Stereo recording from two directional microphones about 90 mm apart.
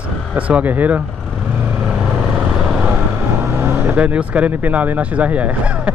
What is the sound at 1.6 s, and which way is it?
Vehicle, 10° right (ahead or behind).